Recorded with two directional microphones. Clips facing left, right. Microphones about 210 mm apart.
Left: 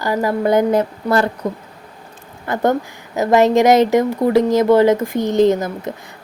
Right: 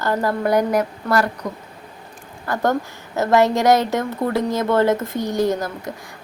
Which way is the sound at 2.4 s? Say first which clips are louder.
Left 3 dB; 20° left (ahead or behind).